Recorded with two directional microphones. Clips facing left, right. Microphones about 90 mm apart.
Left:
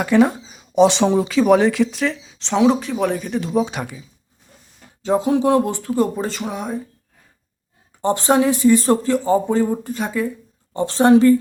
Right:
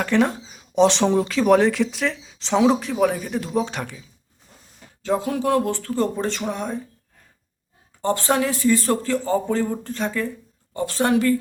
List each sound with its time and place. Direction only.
0.0 s speech: 10° left (ahead or behind)
5.0 s speech: 20° left (ahead or behind); by 6.8 s 5° left (ahead or behind)
8.0 s speech: 20° left (ahead or behind)
10.8 s speech: 25° left (ahead or behind)